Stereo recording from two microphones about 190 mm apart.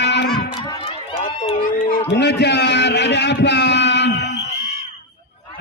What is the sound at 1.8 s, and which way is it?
A man's voice, 45° left (ahead or behind).